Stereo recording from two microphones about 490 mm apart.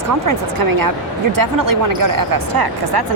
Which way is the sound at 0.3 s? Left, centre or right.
Right.